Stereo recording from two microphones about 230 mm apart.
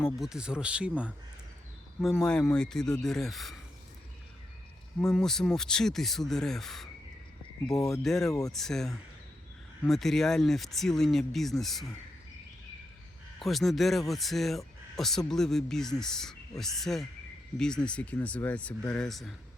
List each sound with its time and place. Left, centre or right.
0.0 s speech: centre
4.9 s speech: centre
8.3 s speech: centre
8.5 s speech: centre
13.4 s speech: centre